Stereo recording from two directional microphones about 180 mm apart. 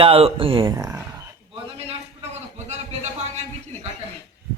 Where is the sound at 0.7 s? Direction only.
15° right (ahead or behind).